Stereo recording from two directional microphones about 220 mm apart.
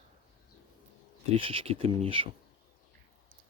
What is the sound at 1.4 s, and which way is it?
Speech, 25° right (ahead or behind).